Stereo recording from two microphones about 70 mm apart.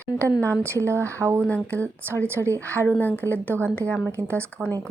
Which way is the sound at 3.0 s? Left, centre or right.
Left.